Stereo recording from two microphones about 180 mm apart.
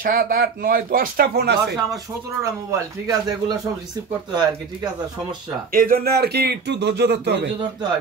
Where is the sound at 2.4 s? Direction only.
20° right (ahead or behind).